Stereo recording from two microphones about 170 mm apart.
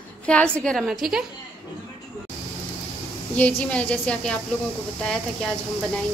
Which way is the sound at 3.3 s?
10° left (ahead or behind).